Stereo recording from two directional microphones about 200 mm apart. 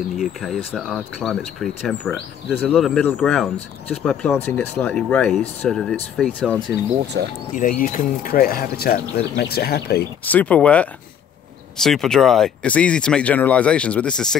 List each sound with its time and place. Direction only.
0.2 s speech: centre (ahead or behind)
7.2 s speech: 65° right (ahead or behind)
7.5 s speech: 40° left (ahead or behind)
10.2 s speech: 5° left (ahead or behind)